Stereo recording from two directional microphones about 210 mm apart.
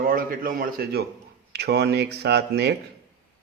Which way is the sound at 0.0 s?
45° right (ahead or behind).